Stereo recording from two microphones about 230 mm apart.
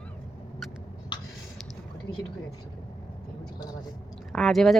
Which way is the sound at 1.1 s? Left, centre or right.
Centre.